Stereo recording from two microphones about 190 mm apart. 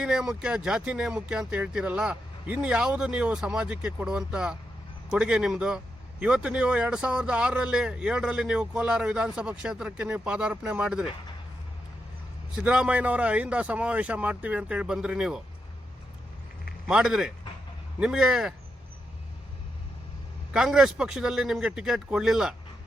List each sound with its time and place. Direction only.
0.0 s speech: 5° right (ahead or behind)
12.5 s a man's voice: 5° right (ahead or behind)
16.9 s speech: 5° right (ahead or behind)
20.5 s speech: 5° right (ahead or behind)